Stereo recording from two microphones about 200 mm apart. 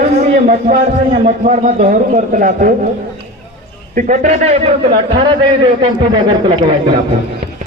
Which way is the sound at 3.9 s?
40° right (ahead or behind).